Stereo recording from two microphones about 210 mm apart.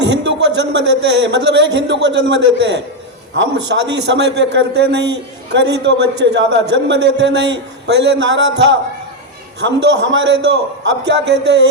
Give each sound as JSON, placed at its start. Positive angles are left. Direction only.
{"t": 0.0, "sound": "a man's voice", "side_deg": -55}
{"t": 9.6, "sound": "a man's voice", "side_deg": -55}